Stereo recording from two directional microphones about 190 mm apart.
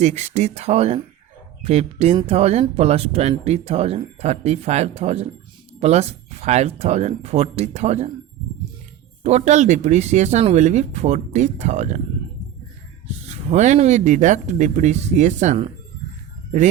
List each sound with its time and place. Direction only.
0.0 s speech: 35° right (ahead or behind)
9.2 s speech: 35° right (ahead or behind)
13.2 s speech: 35° right (ahead or behind)